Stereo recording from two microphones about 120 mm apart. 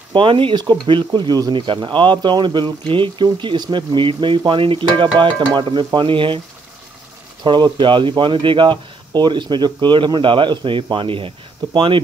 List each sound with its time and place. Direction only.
0.1 s speech: 45° right (ahead or behind)
7.4 s speech: 40° right (ahead or behind)